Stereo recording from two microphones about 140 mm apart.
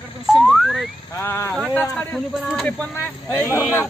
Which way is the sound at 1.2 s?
20° left (ahead or behind).